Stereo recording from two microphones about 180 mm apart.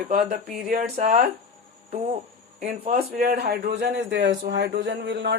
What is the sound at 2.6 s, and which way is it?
Speech, 60° right (ahead or behind).